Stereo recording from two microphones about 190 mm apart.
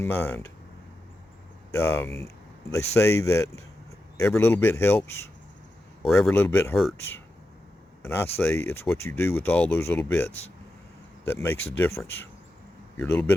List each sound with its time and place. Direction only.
0.0 s speech: 10° left (ahead or behind)
1.7 s speech: 10° left (ahead or behind)
6.0 s speech: centre (ahead or behind)
8.0 s speech: 10° left (ahead or behind)